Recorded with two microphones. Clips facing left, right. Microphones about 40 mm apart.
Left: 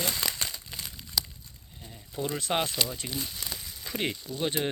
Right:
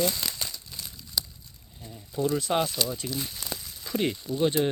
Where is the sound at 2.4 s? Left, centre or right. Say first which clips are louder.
Even; left.